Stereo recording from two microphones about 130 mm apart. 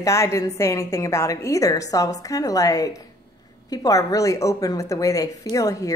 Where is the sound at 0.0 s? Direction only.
25° left (ahead or behind).